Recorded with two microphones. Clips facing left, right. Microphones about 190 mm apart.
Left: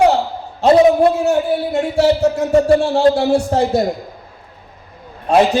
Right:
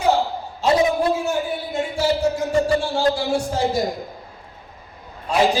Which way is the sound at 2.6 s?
65° left (ahead or behind).